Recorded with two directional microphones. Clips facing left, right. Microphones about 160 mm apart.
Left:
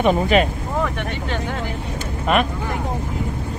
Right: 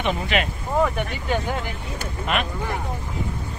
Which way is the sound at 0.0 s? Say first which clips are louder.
Left 7 dB; 40° left (ahead or behind).